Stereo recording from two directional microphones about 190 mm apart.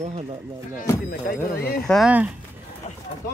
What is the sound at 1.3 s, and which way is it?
Speech, 50° left (ahead or behind).